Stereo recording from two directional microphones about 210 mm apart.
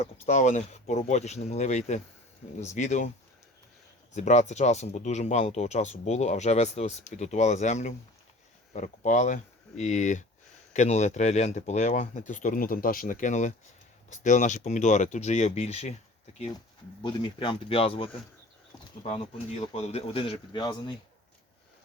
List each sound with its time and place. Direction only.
0.0 s speech: 35° left (ahead or behind)
4.1 s speech: 35° left (ahead or behind)
17.0 s speech: 25° left (ahead or behind)
19.7 s speech: 30° left (ahead or behind)